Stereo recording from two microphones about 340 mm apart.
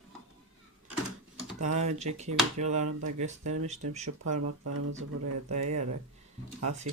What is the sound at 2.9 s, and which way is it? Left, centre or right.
Speech, right.